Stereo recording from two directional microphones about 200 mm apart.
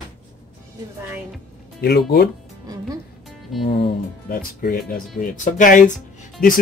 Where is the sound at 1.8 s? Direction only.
55° left (ahead or behind).